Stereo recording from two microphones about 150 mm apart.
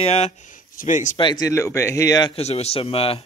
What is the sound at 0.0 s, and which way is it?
Speech, 45° left (ahead or behind).